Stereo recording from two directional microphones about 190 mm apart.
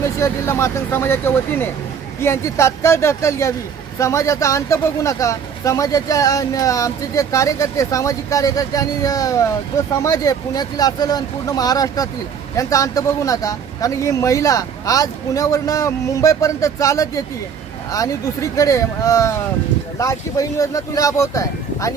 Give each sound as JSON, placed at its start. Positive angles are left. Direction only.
{"t": 0.0, "sound": "speech", "side_deg": 15}